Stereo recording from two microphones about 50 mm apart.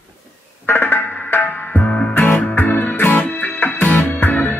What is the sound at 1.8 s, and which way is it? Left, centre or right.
Music, left.